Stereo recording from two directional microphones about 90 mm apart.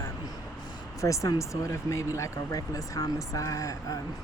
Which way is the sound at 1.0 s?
35° left (ahead or behind).